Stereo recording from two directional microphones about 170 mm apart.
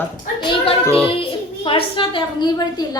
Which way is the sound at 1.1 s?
30° left (ahead or behind).